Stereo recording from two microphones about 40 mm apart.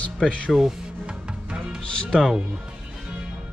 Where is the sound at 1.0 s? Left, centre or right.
Right.